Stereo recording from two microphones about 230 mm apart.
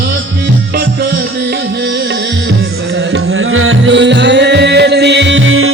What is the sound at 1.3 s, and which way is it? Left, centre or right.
Music, right.